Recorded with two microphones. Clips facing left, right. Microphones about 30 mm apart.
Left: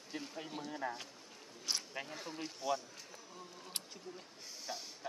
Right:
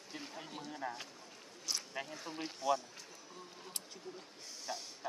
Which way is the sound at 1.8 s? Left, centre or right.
Centre.